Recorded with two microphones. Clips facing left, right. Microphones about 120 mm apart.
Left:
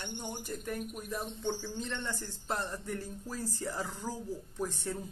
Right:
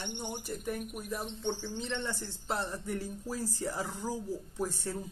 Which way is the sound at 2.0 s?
5° right (ahead or behind).